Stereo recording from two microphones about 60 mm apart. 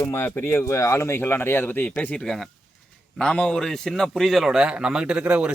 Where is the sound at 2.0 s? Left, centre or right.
Left.